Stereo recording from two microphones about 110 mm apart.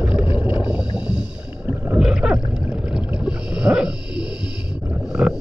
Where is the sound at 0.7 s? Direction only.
10° right (ahead or behind).